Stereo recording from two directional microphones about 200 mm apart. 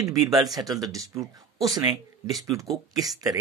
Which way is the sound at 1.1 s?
15° right (ahead or behind).